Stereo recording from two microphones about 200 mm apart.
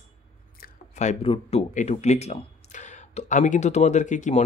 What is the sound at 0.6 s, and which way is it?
Speech, 35° left (ahead or behind).